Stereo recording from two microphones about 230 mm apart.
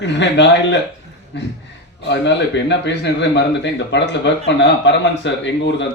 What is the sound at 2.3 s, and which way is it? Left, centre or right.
A man's voice, left.